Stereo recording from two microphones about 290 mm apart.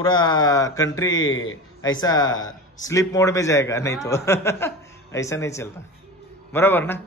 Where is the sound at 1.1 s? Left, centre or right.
Left.